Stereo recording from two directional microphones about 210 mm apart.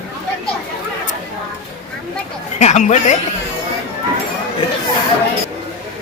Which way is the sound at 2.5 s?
35° left (ahead or behind).